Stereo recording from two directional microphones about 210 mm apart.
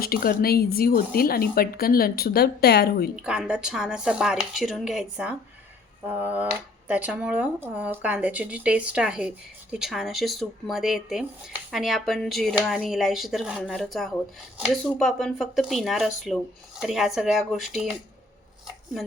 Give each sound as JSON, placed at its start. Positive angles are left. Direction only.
{"t": 0.0, "sound": "speech", "side_deg": 45}
{"t": 3.2, "sound": "speech", "side_deg": -5}